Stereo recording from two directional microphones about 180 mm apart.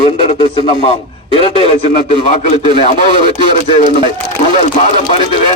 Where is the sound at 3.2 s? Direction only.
25° right (ahead or behind).